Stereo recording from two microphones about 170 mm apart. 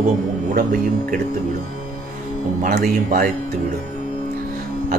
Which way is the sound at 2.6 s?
60° right (ahead or behind).